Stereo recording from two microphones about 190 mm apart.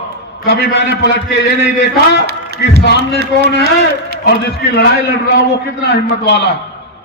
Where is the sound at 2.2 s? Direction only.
55° right (ahead or behind).